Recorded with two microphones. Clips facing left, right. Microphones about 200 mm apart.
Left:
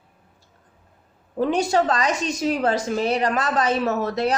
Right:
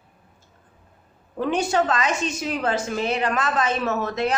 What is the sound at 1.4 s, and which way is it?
A woman's voice, 35° left (ahead or behind).